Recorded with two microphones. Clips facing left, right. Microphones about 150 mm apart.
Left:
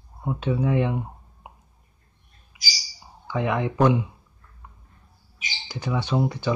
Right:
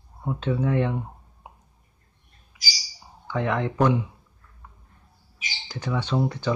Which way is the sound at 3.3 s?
10° left (ahead or behind).